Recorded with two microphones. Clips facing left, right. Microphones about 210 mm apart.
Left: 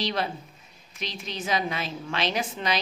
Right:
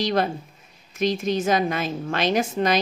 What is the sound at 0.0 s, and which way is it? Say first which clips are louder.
A woman's voice: right 6 dB; 50° right (ahead or behind).